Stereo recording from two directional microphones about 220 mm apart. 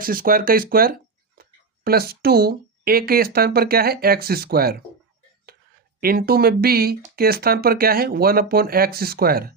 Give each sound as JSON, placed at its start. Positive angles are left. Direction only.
{"t": 0.0, "sound": "speech", "side_deg": -40}
{"t": 6.0, "sound": "speech", "side_deg": -45}